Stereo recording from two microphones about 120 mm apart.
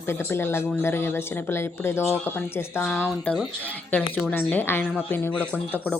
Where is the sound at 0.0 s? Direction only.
20° left (ahead or behind).